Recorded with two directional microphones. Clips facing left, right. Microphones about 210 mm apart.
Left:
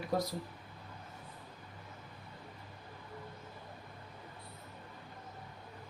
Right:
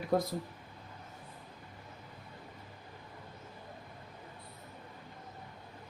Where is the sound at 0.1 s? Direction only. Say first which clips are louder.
Right 4 dB; 50° right (ahead or behind).